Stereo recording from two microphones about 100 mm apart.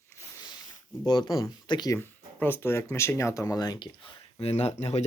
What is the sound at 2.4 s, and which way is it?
Speech, 20° left (ahead or behind).